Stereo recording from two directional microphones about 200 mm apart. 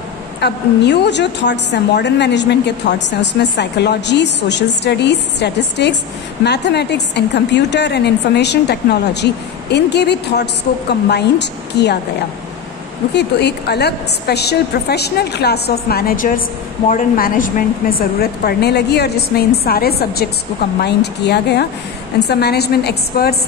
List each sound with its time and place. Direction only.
0.4 s a woman's voice: 60° left (ahead or behind)
13.1 s a woman's voice: 55° left (ahead or behind)